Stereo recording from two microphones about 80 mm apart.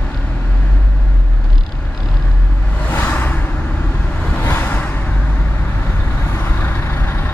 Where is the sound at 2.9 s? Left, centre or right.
Left.